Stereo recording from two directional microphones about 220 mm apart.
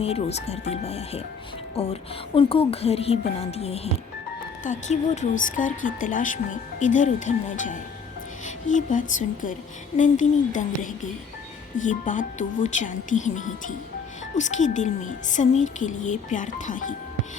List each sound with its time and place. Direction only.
0.0 s a woman's voice: 30° left (ahead or behind)